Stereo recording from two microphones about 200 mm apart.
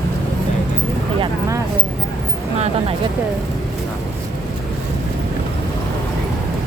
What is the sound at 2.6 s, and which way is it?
Speech, 30° right (ahead or behind).